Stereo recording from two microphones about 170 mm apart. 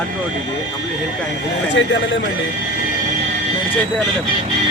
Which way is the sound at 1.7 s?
90° left.